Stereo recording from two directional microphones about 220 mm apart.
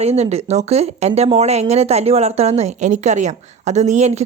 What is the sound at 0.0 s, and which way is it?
Speech, 30° right (ahead or behind).